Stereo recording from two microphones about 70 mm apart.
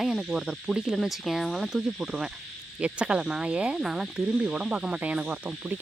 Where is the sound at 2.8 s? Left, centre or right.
Centre.